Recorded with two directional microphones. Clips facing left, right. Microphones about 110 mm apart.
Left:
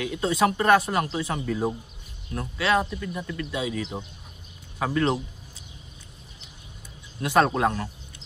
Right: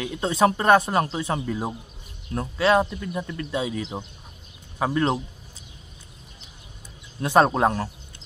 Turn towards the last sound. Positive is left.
turn(degrees=-30)  # may be behind; listen again after turning